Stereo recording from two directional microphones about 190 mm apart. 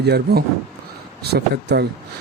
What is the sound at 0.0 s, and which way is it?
Speech, 60° right (ahead or behind).